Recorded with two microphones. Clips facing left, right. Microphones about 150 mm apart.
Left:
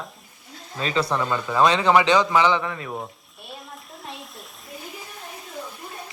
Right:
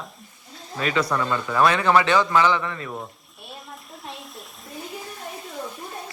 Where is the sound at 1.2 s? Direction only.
20° left (ahead or behind).